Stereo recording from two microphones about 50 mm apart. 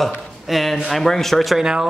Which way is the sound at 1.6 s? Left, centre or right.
Centre.